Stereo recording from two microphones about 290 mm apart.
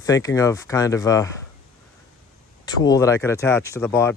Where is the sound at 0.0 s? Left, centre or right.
Centre.